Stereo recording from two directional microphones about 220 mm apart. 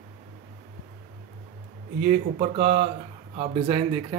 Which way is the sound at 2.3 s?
30° right (ahead or behind).